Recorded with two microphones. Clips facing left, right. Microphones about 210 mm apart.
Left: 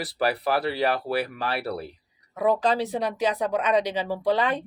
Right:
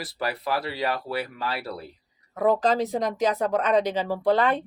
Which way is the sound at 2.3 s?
15° left (ahead or behind).